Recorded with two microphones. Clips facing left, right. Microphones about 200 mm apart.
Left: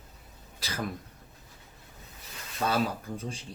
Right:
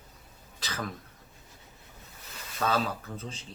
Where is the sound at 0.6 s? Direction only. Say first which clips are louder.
Left 2 dB; 10° left (ahead or behind).